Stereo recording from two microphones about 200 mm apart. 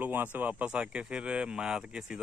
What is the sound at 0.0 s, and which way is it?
Speech, 10° right (ahead or behind).